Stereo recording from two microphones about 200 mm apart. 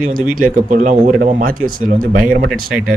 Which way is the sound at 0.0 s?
45° right (ahead or behind).